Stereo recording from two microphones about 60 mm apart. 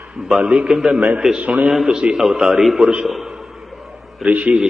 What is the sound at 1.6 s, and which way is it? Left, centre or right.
A man's voice, centre.